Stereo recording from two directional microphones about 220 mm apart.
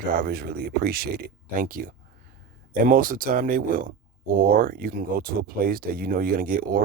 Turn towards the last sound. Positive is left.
turn(degrees=-40)  # may be behind; listen again after turning